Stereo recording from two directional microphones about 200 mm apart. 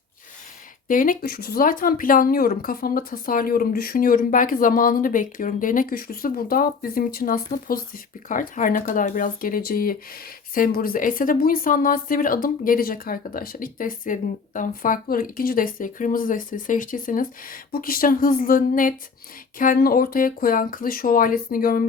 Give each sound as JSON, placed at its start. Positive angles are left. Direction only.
{"t": 0.9, "sound": "speech", "side_deg": 45}